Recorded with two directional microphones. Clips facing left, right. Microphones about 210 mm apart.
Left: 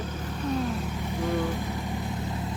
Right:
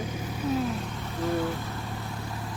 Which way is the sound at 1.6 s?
20° left (ahead or behind).